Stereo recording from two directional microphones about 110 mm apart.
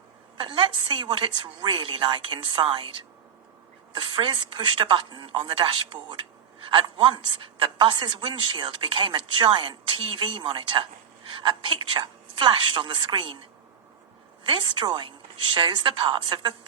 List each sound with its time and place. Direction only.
0.3 s a woman's voice: 50° right (ahead or behind)
3.9 s a woman's voice: 45° right (ahead or behind)
14.4 s a woman's voice: 50° right (ahead or behind)